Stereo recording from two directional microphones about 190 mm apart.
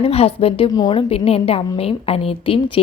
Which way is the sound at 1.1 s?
30° left (ahead or behind).